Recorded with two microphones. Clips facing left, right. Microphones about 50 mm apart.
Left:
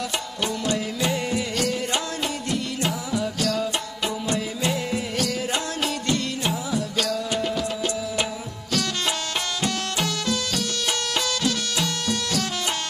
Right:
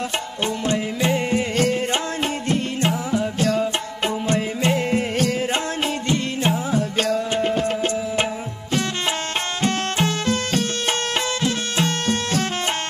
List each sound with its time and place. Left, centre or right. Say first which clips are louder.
0.7 s music: right 4 dB; right
9.6 s music: right 6 dB; right